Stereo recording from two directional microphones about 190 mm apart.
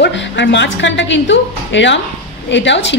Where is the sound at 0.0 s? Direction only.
70° left (ahead or behind).